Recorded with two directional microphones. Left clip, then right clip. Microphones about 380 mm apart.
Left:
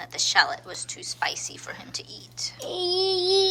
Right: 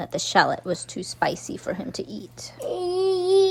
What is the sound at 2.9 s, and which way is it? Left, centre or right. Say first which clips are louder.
Baby cry: right 1 dB; centre.